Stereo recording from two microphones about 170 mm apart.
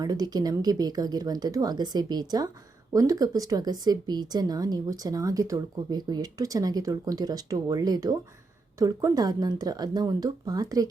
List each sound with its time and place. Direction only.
0.0 s speech: 20° right (ahead or behind)